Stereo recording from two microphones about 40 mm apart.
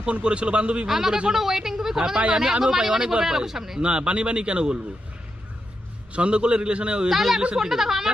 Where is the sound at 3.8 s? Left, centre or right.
Right.